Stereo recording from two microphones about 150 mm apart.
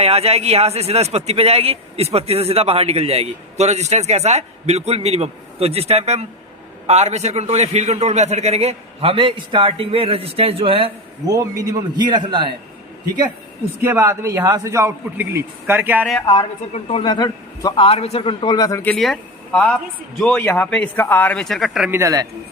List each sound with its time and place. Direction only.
0.0 s speech: 45° right (ahead or behind)
11.3 s a man's voice: 25° right (ahead or behind)
13.8 s a man's voice: 20° right (ahead or behind)
16.2 s a man's voice: 30° left (ahead or behind)
17.8 s a man's voice: 40° left (ahead or behind)
18.8 s speech: 5° left (ahead or behind)
21.8 s a man's voice: 15° right (ahead or behind)